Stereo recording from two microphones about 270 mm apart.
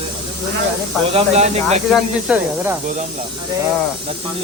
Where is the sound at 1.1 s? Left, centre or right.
Right.